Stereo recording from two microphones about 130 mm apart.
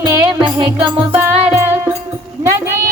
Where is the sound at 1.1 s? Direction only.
15° right (ahead or behind).